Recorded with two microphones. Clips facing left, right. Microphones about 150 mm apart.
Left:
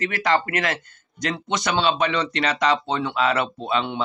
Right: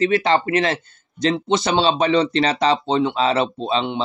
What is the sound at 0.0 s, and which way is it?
Speech, 25° right (ahead or behind).